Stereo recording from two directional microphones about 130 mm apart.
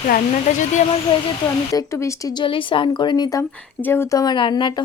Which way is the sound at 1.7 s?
25° left (ahead or behind).